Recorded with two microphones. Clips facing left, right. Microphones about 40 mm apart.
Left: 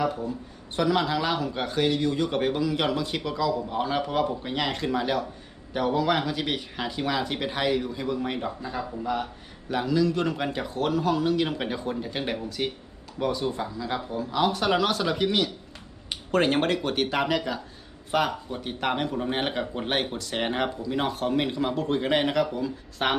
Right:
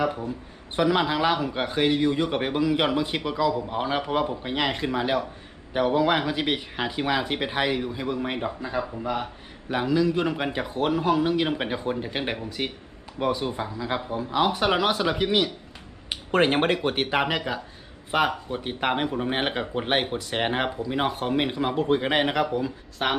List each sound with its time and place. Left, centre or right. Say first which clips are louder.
0.8 s speech: right 2 dB; right
23.0 s a woman's voice: even; centre